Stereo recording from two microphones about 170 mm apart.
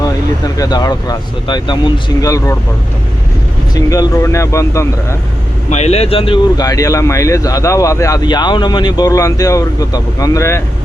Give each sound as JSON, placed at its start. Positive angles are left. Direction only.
{"t": 0.0, "sound": "speech", "side_deg": 20}
{"t": 3.8, "sound": "speech", "side_deg": 20}
{"t": 5.7, "sound": "speech", "side_deg": 40}